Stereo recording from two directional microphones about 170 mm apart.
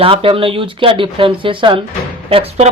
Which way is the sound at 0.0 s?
30° right (ahead or behind).